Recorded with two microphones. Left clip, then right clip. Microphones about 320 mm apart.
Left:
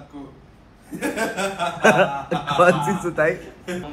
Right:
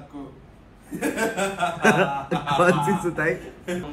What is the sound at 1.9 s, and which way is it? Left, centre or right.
A man's voice, centre.